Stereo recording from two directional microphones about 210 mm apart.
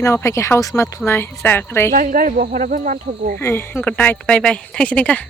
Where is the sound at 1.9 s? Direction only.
40° right (ahead or behind).